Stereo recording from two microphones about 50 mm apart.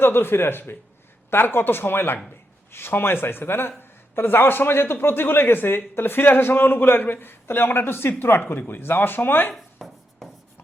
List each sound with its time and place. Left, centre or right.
0.0 s speech: left
9.6 s chopping: centre